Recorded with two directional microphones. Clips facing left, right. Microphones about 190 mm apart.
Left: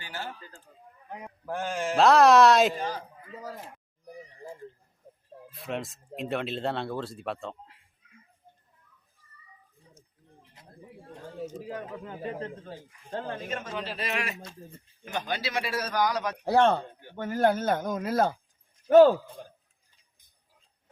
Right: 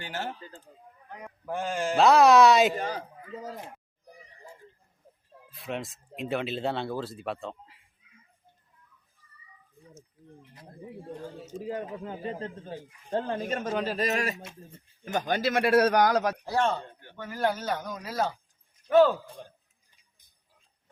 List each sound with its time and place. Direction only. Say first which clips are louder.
0.2 s speech: right 2 dB; 20° right (ahead or behind)
1.5 s speech: right 1 dB; centre (ahead or behind)
5.5 s speech: left 1 dB; centre (ahead or behind)
11.5 s speech: right 3 dB; 25° right (ahead or behind)
13.5 s a man's voice: right 5 dB; 40° right (ahead or behind)
16.4 s a man's voice: left 5 dB; 60° left (ahead or behind)
16.8 s a man's voice: left 2 dB; 10° left (ahead or behind)
17.2 s speech: left 5 dB; 50° left (ahead or behind)
18.9 s speech: left 4 dB; 40° left (ahead or behind)
19.4 s speech: left 1 dB; 5° left (ahead or behind)